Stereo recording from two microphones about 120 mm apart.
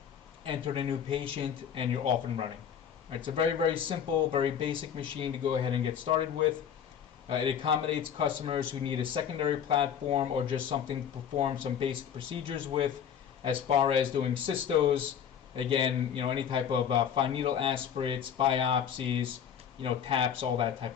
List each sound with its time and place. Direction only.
0.4 s a man's voice: 45° right (ahead or behind)
3.1 s a man's voice: 45° right (ahead or behind)
7.3 s a man's voice: 50° right (ahead or behind)